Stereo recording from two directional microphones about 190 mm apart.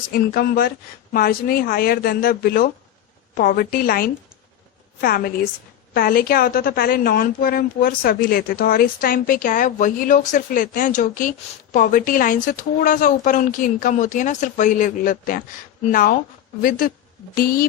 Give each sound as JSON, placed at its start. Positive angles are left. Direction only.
{"t": 0.1, "sound": "a woman's voice", "side_deg": 55}